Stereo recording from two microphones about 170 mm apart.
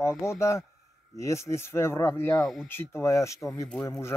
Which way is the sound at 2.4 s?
Centre (ahead or behind).